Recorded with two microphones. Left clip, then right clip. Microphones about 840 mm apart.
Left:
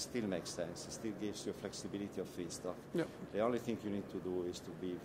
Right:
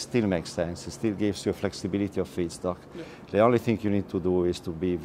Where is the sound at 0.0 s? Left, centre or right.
Right.